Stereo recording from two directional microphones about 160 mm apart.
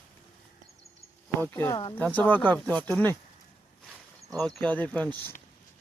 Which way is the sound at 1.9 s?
10° left (ahead or behind).